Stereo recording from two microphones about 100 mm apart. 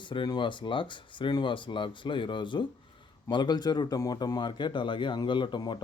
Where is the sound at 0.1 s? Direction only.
50° left (ahead or behind).